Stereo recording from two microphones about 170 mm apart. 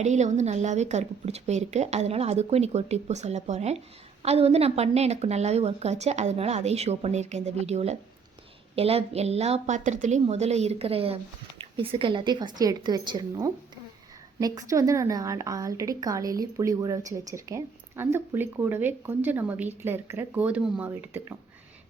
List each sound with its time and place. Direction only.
0.0 s a woman's voice: 45° right (ahead or behind); by 21.3 s 15° right (ahead or behind)